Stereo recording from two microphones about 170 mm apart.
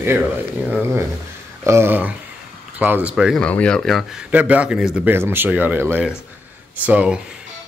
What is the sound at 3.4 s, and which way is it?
Speech, 5° left (ahead or behind).